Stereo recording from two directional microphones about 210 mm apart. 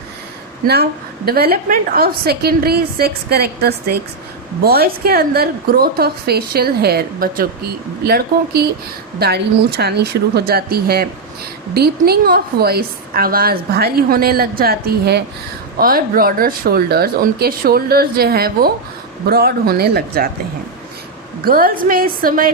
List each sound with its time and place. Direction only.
0.7 s a woman's voice: 50° right (ahead or behind)
21.4 s a woman's voice: 45° right (ahead or behind)